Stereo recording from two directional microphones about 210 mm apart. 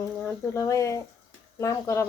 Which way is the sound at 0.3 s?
15° left (ahead or behind).